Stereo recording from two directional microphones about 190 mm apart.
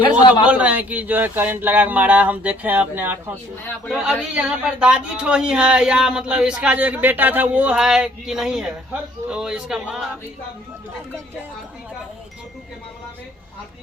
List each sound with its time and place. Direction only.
0.0 s a man's voice: 25° left (ahead or behind)
0.4 s speech: 5° right (ahead or behind)